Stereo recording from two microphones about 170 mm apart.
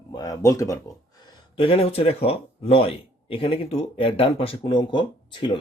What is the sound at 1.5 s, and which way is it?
Speech, 35° left (ahead or behind).